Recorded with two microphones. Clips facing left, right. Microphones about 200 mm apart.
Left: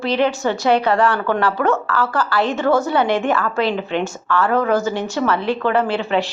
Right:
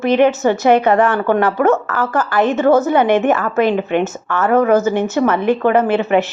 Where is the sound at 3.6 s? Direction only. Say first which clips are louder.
Right 5 dB; 50° right (ahead or behind).